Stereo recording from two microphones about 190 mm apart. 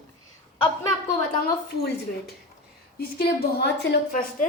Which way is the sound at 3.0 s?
55° left (ahead or behind).